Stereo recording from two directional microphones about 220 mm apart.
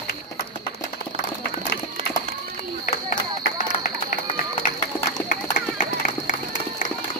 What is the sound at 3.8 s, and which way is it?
Run, 35° left (ahead or behind).